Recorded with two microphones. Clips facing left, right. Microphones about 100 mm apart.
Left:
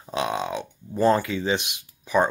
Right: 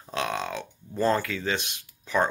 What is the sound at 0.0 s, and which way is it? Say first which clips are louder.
Speech: left 3 dB; 15° left (ahead or behind).